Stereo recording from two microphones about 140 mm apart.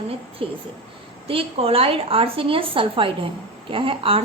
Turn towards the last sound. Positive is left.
turn(degrees=-40)  # may be behind; listen again after turning